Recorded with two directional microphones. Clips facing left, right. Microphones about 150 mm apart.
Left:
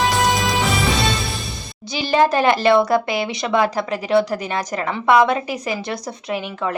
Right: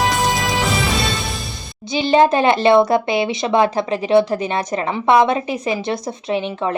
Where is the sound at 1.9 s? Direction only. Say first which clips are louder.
Right 3 dB; 20° right (ahead or behind).